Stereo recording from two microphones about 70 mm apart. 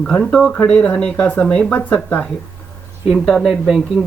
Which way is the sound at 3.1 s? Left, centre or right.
Centre.